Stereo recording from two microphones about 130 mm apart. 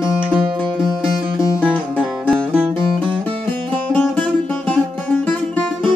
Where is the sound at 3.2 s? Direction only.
15° left (ahead or behind).